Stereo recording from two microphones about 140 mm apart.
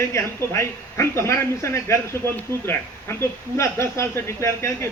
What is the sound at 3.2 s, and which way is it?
Speech, 20° left (ahead or behind).